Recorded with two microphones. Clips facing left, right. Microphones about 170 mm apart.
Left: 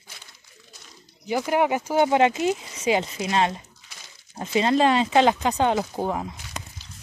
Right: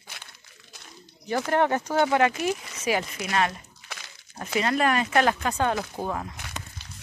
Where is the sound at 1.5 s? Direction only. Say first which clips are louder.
Left 1 dB; 10° left (ahead or behind).